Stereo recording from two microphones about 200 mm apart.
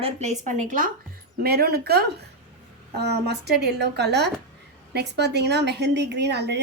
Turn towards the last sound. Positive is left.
turn(degrees=-55)  # may be behind; listen again after turning